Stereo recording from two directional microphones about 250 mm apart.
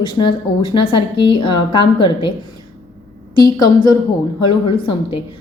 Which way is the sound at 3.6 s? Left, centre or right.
Centre.